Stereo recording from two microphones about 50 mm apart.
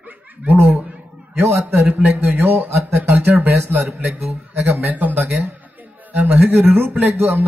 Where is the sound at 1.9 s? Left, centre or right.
Right.